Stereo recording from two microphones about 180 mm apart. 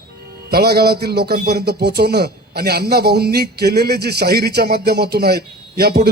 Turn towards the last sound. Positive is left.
turn(degrees=-60)  # may be behind; listen again after turning